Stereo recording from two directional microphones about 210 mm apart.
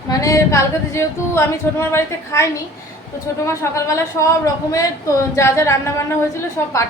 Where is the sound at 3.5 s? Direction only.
15° left (ahead or behind).